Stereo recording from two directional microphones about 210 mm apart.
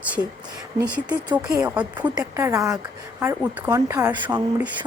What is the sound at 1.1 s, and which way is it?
A woman's voice, 15° right (ahead or behind).